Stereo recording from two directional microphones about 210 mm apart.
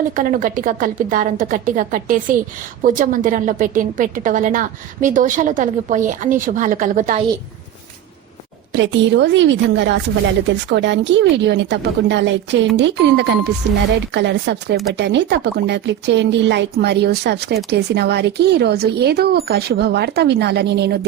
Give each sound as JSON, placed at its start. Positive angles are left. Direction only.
{"t": 0.2, "sound": "a woman's voice", "side_deg": -40}
{"t": 8.7, "sound": "a woman's voice", "side_deg": -60}